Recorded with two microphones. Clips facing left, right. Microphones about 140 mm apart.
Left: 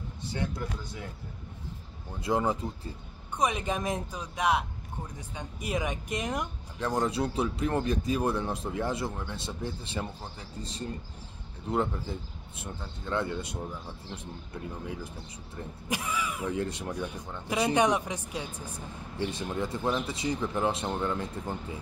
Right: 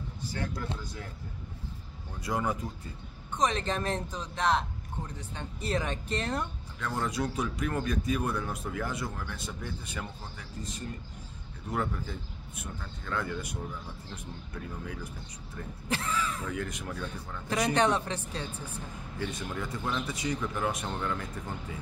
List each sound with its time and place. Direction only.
0.2 s speech: 20° left (ahead or behind)
2.1 s speech: 25° left (ahead or behind)
3.3 s a man's voice: 10° left (ahead or behind)
7.0 s speech: 30° left (ahead or behind)
15.9 s a man's voice: 10° left (ahead or behind)
16.4 s speech: 30° left (ahead or behind)
16.9 s a man's voice: 15° left (ahead or behind)
19.1 s speech: 25° left (ahead or behind)